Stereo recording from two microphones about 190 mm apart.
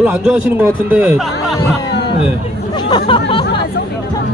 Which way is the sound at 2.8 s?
25° left (ahead or behind).